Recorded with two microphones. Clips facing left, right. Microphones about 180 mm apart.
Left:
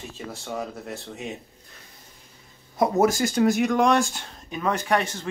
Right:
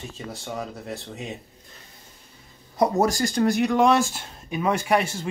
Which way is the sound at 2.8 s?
5° left (ahead or behind).